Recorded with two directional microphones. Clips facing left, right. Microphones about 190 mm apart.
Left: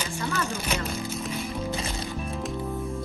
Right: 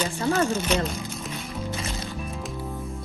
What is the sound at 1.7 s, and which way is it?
Music, 30° left (ahead or behind).